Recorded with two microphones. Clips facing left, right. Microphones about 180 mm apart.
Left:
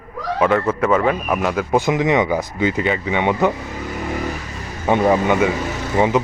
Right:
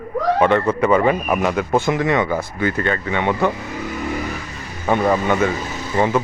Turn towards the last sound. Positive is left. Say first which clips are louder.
# left 1 dB
turn(degrees=15)  # may be behind; listen again after turning